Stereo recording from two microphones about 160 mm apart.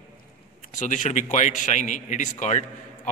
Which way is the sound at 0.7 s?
50° left (ahead or behind).